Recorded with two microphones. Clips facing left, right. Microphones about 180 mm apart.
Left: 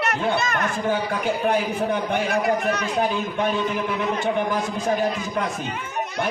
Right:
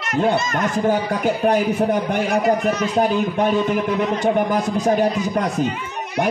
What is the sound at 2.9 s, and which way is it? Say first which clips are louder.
A man's voice: right 5 dB; 40° right (ahead or behind).